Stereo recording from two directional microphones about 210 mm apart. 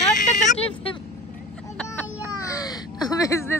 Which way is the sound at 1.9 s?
15° left (ahead or behind).